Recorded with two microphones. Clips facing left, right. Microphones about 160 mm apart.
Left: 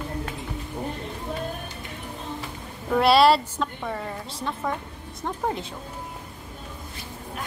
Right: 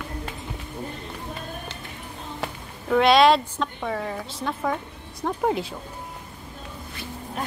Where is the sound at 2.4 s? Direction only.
70° right (ahead or behind).